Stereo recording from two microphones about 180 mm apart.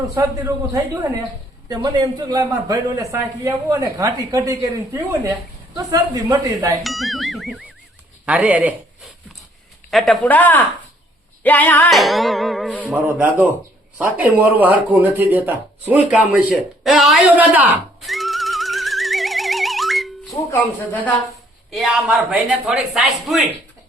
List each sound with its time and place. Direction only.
0.1 s a man's voice: 20° right (ahead or behind)
6.8 s speech: centre (ahead or behind)
9.9 s speech: centre (ahead or behind)
16.0 s a sound: 5° right (ahead or behind)
20.3 s speech: 10° left (ahead or behind)
21.7 s speech: centre (ahead or behind)